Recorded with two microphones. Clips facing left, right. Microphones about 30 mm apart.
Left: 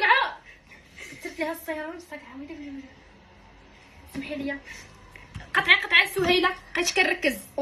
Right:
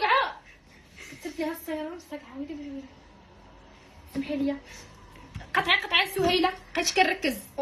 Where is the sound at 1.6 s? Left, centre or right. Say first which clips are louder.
Left 1 dB; left.